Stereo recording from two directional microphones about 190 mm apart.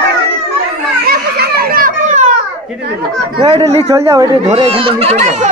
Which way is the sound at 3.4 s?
20° right (ahead or behind).